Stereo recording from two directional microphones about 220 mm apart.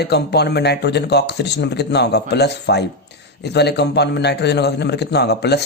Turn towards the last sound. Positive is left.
turn(degrees=50)  # may be behind; listen again after turning